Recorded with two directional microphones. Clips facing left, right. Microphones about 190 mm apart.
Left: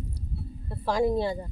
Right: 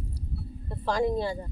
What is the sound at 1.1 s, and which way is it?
Speech, 20° left (ahead or behind).